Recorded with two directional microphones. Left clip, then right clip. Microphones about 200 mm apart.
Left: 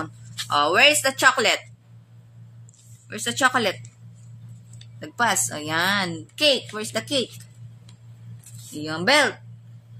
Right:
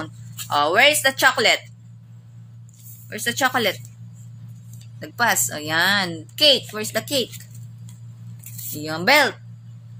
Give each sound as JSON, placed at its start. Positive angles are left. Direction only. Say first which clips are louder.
{"t": 0.0, "sound": "speech", "louder": "left 2 dB", "side_deg": 35}
{"t": 3.1, "sound": "a woman's voice", "louder": "even", "side_deg": 35}
{"t": 4.9, "sound": "a woman's voice", "louder": "right 2 dB", "side_deg": 30}
{"t": 8.7, "sound": "a woman's voice", "louder": "right 2 dB", "side_deg": 30}